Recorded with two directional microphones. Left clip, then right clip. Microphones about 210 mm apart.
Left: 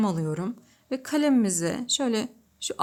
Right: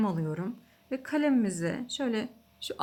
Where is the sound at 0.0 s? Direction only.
30° left (ahead or behind).